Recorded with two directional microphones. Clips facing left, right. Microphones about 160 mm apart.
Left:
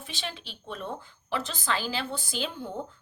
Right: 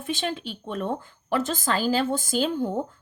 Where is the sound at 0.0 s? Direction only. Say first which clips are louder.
Right 10 dB; 50° right (ahead or behind).